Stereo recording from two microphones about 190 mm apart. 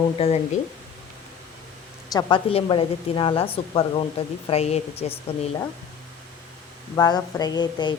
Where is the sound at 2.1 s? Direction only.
30° left (ahead or behind).